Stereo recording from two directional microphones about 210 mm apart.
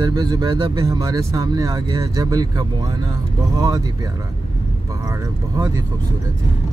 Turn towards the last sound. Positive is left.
turn(degrees=-15)  # may be behind; listen again after turning